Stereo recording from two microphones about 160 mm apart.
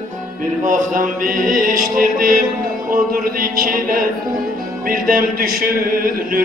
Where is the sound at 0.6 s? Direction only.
55° right (ahead or behind).